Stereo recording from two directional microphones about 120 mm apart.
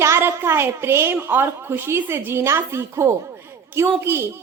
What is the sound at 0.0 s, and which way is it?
A woman's voice, 20° right (ahead or behind).